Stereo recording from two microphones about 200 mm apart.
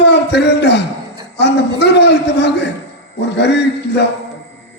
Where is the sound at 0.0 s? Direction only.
60° left (ahead or behind).